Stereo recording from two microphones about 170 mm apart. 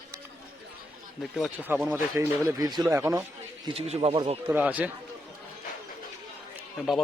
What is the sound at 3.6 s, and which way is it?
Speech, 35° right (ahead or behind).